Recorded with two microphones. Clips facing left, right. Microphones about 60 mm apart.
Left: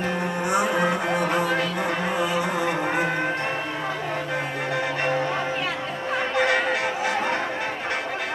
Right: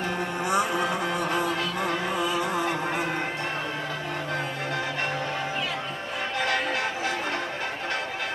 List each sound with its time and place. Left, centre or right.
0.4 s music: left